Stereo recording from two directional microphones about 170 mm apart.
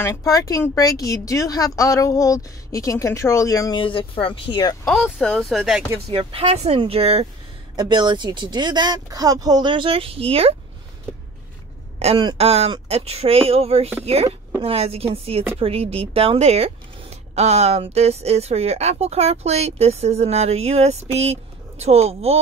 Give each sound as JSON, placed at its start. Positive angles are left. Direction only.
{"t": 0.0, "sound": "speech", "side_deg": 20}
{"t": 4.8, "sound": "speech", "side_deg": 0}
{"t": 6.0, "sound": "speech", "side_deg": -35}
{"t": 7.7, "sound": "speech", "side_deg": -25}
{"t": 12.0, "sound": "speech", "side_deg": -35}